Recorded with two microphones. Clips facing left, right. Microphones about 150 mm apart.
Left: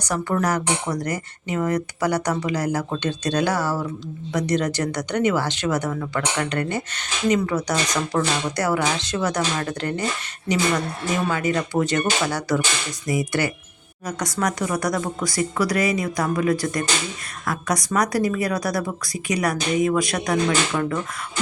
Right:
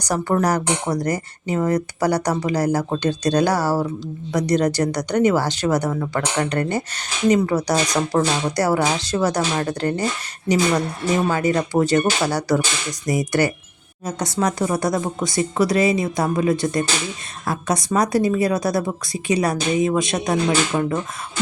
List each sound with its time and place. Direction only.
0.0 s speech: 35° right (ahead or behind)
11.3 s speech: 35° right (ahead or behind)
14.0 s a woman's voice: 25° right (ahead or behind)